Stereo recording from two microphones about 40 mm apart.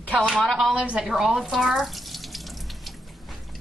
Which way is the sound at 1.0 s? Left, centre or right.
Centre.